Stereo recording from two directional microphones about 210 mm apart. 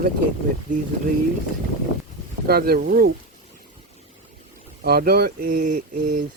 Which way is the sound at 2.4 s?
50° right (ahead or behind).